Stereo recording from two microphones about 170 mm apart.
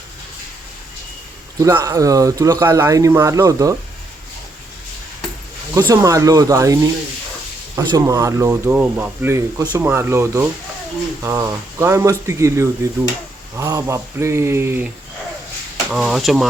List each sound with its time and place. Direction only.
1.5 s speech: 20° right (ahead or behind)
5.9 s speech: 20° right (ahead or behind)
7.8 s speech: 25° right (ahead or behind)
15.9 s speech: 5° right (ahead or behind)